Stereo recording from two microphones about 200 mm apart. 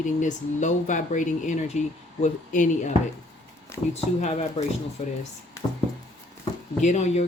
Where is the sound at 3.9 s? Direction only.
35° left (ahead or behind).